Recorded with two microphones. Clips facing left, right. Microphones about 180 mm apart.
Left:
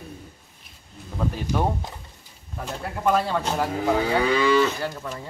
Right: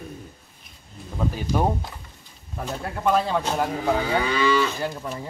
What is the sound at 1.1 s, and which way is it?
Speech, 5° right (ahead or behind).